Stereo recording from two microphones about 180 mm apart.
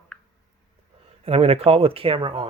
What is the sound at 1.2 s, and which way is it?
Speech, 35° right (ahead or behind).